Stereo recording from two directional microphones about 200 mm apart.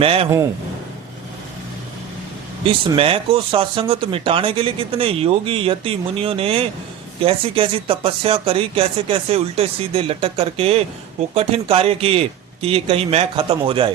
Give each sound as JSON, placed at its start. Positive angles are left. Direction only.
{"t": 0.0, "sound": "speech", "side_deg": -30}
{"t": 2.6, "sound": "speech", "side_deg": -25}